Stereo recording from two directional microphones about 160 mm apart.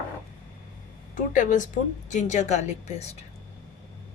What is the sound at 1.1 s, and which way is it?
A woman's voice, 55° left (ahead or behind).